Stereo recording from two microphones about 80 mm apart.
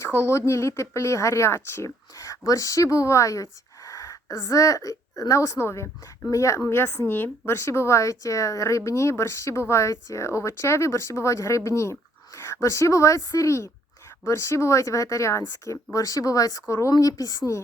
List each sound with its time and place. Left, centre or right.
0.0 s a woman's voice: left